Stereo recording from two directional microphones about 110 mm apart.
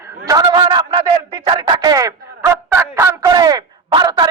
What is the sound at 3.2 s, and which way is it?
A man's voice, 35° right (ahead or behind).